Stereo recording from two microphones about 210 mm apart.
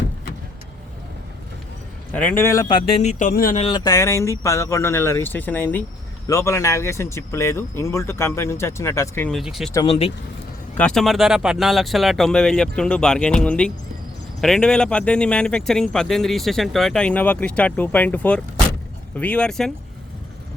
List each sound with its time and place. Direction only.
2.1 s speech: 10° left (ahead or behind)
2.9 s speech: 35° left (ahead or behind)
3.7 s speech: 20° left (ahead or behind); by 9.7 s centre (ahead or behind)
9.7 s speech: 25° left (ahead or behind)
10.8 s speech: 5° left (ahead or behind)